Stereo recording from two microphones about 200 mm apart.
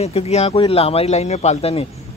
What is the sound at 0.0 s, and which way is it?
Speech, 30° left (ahead or behind).